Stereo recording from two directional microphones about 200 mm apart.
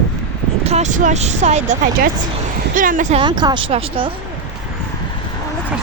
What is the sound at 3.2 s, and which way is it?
Speech, 20° right (ahead or behind).